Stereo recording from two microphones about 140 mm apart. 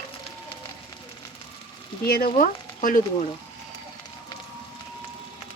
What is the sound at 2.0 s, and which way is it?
Speech, 90° left.